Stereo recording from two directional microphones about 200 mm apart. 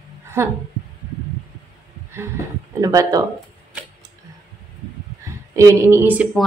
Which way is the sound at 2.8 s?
15° right (ahead or behind).